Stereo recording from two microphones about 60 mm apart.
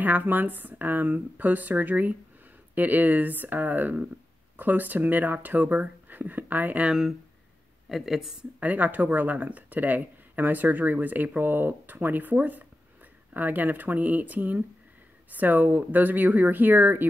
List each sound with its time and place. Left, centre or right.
0.0 s speech: right
6.9 s speech: centre
8.5 s speech: right